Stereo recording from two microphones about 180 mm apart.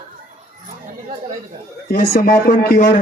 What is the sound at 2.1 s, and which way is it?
Speech, 50° left (ahead or behind).